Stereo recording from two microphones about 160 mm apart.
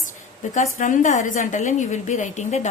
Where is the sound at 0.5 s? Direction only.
50° left (ahead or behind).